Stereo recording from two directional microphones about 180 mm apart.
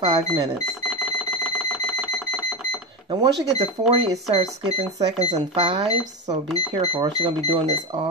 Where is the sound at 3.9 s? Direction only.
30° right (ahead or behind).